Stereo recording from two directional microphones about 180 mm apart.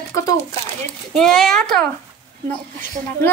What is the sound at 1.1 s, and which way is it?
Speech, centre (ahead or behind).